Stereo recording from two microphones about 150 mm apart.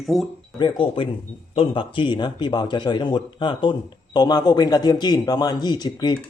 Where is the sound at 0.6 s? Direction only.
35° left (ahead or behind).